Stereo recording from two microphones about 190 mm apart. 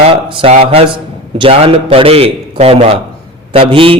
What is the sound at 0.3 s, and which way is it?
A man's voice, 30° right (ahead or behind).